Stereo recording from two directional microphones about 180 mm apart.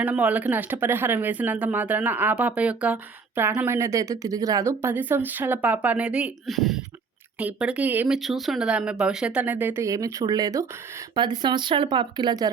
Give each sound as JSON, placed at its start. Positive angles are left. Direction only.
{"t": 0.0, "sound": "speech", "side_deg": -10}